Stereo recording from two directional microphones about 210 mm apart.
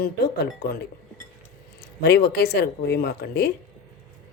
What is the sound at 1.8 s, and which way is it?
Speech, 55° left (ahead or behind).